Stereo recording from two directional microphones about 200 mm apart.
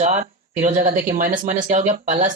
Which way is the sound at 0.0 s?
35° right (ahead or behind).